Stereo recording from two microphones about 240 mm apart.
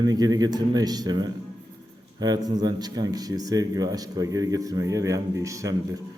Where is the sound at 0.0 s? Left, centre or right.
Centre.